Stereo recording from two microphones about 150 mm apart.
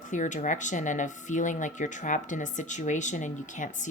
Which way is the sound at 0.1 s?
55° left (ahead or behind).